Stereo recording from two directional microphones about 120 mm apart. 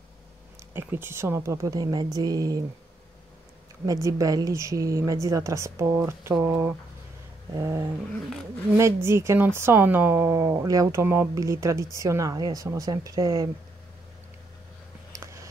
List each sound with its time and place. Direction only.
0.7 s speech: 20° right (ahead or behind)
3.8 s speech: 30° right (ahead or behind)